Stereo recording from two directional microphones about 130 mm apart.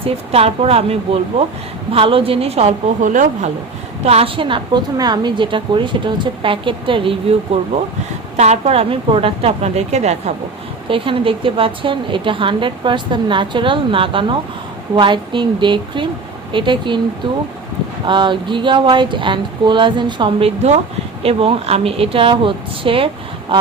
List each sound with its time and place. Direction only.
0.0 s a woman's voice: 50° right (ahead or behind)
3.0 s speech: 75° right (ahead or behind)
4.0 s a woman's voice: 50° right (ahead or behind)
8.4 s a woman's voice: 55° right (ahead or behind)
10.8 s a woman's voice: 40° right (ahead or behind)
21.2 s a woman's voice: 50° right (ahead or behind)